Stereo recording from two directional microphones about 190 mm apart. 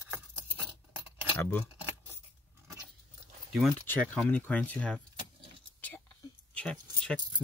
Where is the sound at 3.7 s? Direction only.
10° left (ahead or behind).